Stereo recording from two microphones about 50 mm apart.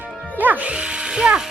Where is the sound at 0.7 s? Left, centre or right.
Right.